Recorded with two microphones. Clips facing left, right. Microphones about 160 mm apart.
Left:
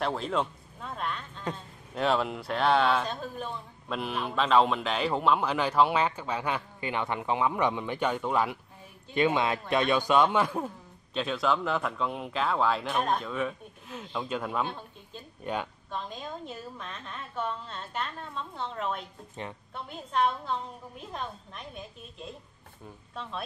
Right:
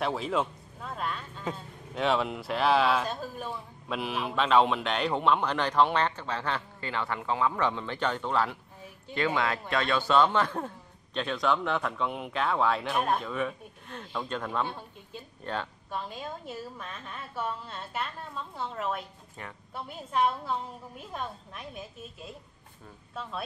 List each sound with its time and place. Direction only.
0.0 s speech: 5° right (ahead or behind); by 15.7 s 15° left (ahead or behind)
15.9 s a woman's voice: 10° right (ahead or behind)
19.4 s a woman's voice: 20° left (ahead or behind)
19.7 s speech: 5° right (ahead or behind)